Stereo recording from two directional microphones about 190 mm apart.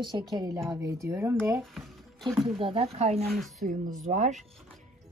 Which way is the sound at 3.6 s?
45° right (ahead or behind).